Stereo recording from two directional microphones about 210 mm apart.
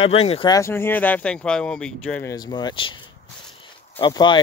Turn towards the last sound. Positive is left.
turn(degrees=20)  # may be behind; listen again after turning